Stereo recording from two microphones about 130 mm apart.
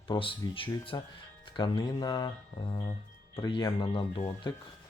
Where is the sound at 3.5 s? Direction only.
35° left (ahead or behind).